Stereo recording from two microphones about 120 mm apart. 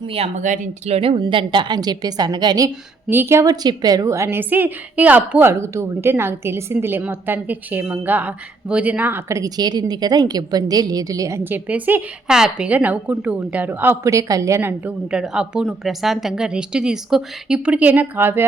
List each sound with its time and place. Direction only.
0.1 s a woman's voice: 65° right (ahead or behind); by 2.6 s 35° right (ahead or behind)
3.1 s a woman's voice: 20° right (ahead or behind)
9.4 s a woman's voice: 35° right (ahead or behind); by 18.4 s 20° right (ahead or behind)